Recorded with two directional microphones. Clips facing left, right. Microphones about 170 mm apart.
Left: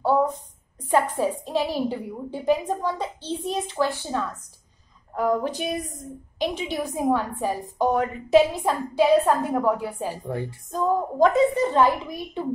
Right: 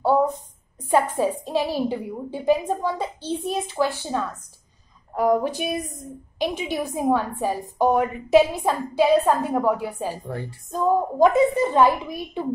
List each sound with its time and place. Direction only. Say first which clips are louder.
0.8 s a woman's voice: right 1 dB; 15° right (ahead or behind)
10.2 s speech: left 2 dB; 15° left (ahead or behind)
10.7 s a woman's voice: right 3 dB; 15° right (ahead or behind)